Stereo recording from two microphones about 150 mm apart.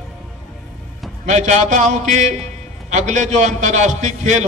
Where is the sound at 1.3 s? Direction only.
50° right (ahead or behind).